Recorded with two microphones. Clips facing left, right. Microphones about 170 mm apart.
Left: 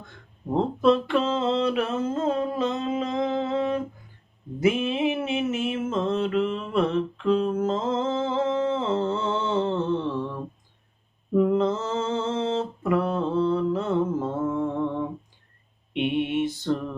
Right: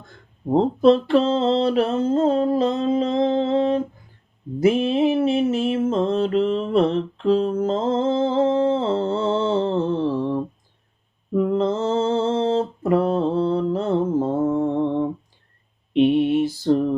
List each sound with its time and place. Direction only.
0.5 s a sound: 35° right (ahead or behind)
4.6 s mantra: 35° right (ahead or behind)
11.5 s mantra: 30° right (ahead or behind)